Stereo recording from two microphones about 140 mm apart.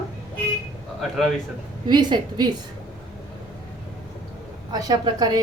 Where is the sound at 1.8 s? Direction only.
30° right (ahead or behind).